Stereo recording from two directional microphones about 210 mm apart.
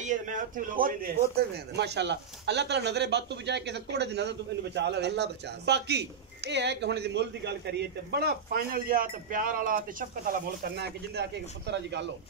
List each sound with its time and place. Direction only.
0.0 s a man's voice: 40° right (ahead or behind); by 12.1 s 55° right (ahead or behind)